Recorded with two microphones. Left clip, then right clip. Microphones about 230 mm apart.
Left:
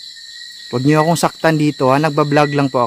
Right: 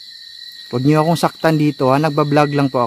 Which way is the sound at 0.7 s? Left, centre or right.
Centre.